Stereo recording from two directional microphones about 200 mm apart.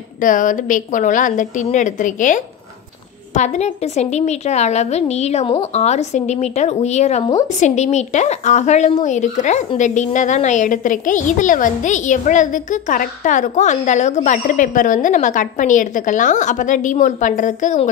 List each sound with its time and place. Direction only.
0.2 s a woman's voice: 40° left (ahead or behind)